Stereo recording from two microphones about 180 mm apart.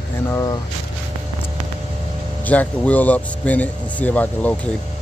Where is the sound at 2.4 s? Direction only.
10° left (ahead or behind).